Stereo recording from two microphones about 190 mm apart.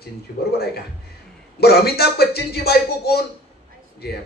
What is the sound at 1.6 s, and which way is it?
Speech, 55° left (ahead or behind).